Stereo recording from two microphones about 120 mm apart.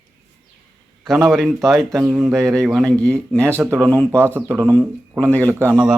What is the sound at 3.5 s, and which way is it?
Speech, 20° right (ahead or behind).